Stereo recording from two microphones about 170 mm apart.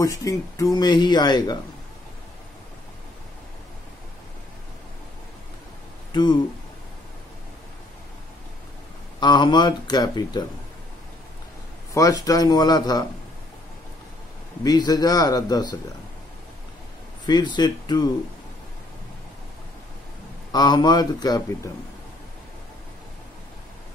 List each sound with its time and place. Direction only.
0.0 s speech: 20° left (ahead or behind)
6.1 s speech: 25° left (ahead or behind)
9.2 s speech: 25° left (ahead or behind)
11.9 s speech: 20° left (ahead or behind)
14.6 s speech: 25° left (ahead or behind)
17.3 s speech: 25° left (ahead or behind)
20.5 s speech: 25° left (ahead or behind)